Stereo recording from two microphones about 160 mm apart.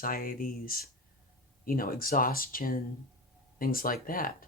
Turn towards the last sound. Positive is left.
turn(degrees=65)  # may be behind; listen again after turning